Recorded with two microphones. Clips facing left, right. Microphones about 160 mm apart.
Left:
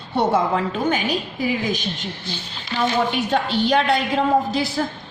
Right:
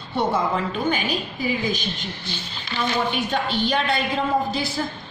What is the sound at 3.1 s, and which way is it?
Speech, 80° left.